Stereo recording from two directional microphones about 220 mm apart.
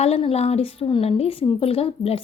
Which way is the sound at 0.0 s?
25° left (ahead or behind).